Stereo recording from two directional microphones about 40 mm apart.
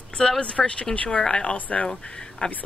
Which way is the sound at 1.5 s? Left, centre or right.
Left.